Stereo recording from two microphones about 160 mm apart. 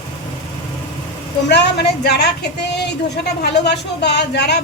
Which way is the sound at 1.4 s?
90° left.